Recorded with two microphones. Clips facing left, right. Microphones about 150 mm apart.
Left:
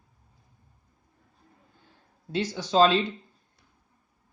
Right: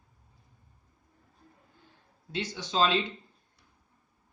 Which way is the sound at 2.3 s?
40° left (ahead or behind).